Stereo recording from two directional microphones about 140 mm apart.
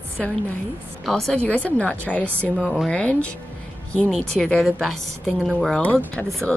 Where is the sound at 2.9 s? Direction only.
10° left (ahead or behind).